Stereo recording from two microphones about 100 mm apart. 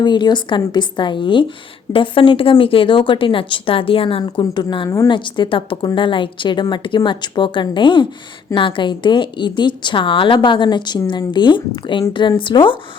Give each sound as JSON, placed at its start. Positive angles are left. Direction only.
{"t": 0.0, "sound": "a woman's voice", "side_deg": 50}
{"t": 4.2, "sound": "a woman's voice", "side_deg": 50}